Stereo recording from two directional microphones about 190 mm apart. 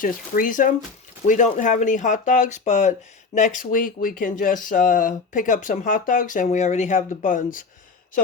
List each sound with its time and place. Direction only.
0.0 s speech: 45° left (ahead or behind)